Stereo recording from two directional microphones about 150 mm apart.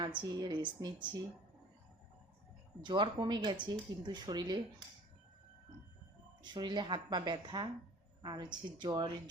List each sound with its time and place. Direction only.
0.2 s speech: 30° right (ahead or behind)
2.8 s speech: 30° right (ahead or behind)
6.4 s speech: 30° right (ahead or behind)